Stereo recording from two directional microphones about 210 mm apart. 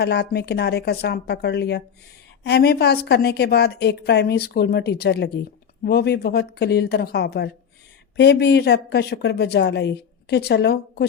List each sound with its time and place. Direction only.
0.0 s a woman's voice: 50° left (ahead or behind)